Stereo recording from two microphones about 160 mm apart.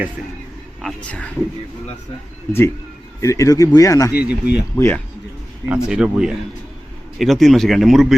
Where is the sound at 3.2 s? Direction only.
20° left (ahead or behind).